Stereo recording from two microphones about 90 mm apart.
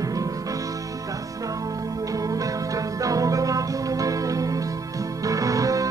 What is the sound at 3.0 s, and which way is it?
Music, 40° right (ahead or behind).